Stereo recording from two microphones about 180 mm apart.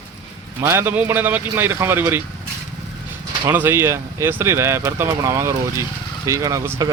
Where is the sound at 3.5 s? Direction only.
15° right (ahead or behind).